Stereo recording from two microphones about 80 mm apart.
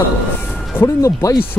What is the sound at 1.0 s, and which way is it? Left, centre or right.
Speech, left.